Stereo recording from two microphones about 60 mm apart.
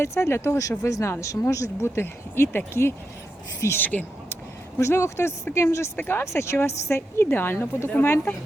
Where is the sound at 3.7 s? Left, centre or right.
Left.